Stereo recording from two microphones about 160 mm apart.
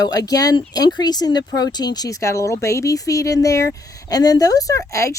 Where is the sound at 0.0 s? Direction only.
25° left (ahead or behind).